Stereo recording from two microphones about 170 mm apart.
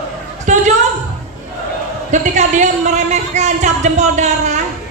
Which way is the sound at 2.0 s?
45° right (ahead or behind).